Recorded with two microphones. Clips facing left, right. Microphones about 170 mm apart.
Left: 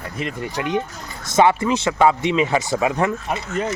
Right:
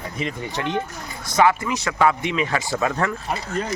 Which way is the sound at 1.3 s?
25° left (ahead or behind).